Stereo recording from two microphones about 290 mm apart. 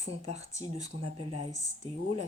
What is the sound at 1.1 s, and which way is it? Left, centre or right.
Speech, centre.